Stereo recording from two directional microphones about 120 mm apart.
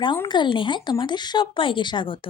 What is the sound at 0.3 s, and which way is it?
Speech, 40° left (ahead or behind).